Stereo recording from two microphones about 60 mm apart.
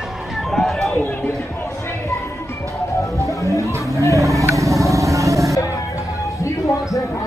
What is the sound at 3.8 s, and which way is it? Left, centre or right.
Vehicle, left.